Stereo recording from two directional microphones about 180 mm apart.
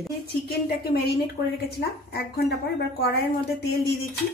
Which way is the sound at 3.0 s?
60° left (ahead or behind).